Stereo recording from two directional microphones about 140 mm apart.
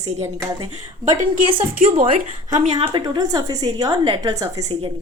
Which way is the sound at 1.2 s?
70° right (ahead or behind).